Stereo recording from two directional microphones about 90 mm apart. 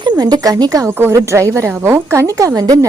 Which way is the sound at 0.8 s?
30° right (ahead or behind).